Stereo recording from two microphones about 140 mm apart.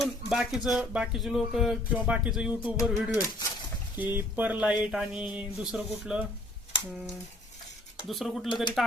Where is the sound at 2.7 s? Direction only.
20° left (ahead or behind).